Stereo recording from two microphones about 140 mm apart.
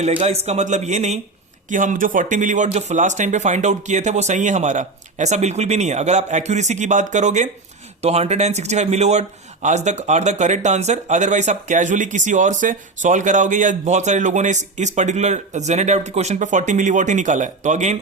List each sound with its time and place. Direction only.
0.0 s a man's voice: 50° right (ahead or behind)
1.7 s speech: 65° right (ahead or behind)
2.6 s speech: 55° right (ahead or behind)
8.0 s speech: 50° right (ahead or behind)